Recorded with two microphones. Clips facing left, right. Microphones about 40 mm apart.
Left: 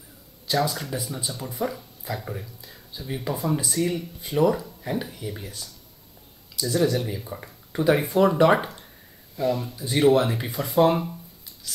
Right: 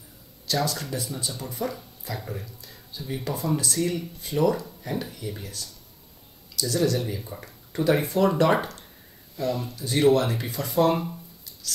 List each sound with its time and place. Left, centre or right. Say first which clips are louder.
0.5 s speech: left 2 dB; centre
6.7 s speech: left 2 dB; centre